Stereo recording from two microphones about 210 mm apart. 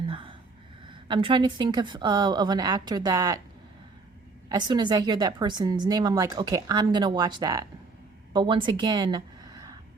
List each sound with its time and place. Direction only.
0.1 s a sound: 25° right (ahead or behind)
0.9 s a woman's voice: 20° right (ahead or behind)
4.4 s a woman's voice: 20° right (ahead or behind)